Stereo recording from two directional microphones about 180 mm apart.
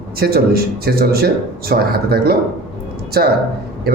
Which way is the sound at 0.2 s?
60° right (ahead or behind).